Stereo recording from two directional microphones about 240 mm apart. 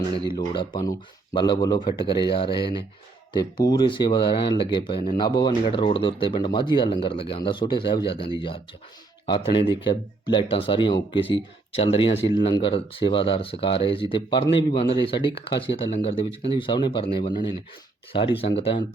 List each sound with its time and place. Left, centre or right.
0.3 s speech: centre